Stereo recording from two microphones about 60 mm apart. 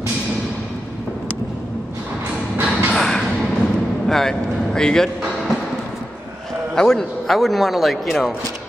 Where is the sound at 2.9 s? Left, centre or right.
Centre.